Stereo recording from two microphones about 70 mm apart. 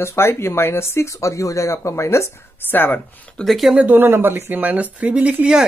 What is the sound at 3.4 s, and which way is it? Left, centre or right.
Speech, centre.